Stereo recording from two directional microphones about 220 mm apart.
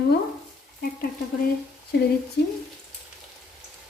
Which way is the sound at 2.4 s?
50° left (ahead or behind).